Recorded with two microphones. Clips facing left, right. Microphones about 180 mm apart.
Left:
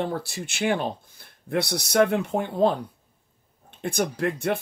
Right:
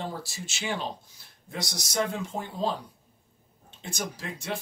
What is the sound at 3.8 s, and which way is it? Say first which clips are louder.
Speech: left 11 dB; 60° left (ahead or behind).